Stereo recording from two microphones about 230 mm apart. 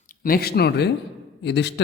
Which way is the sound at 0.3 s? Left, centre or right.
Left.